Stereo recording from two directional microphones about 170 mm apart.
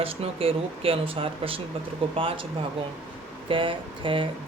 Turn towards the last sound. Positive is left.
turn(degrees=-30)  # may be behind; listen again after turning